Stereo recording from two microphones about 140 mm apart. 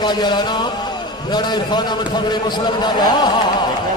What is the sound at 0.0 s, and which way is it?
A man's voice, 30° left (ahead or behind).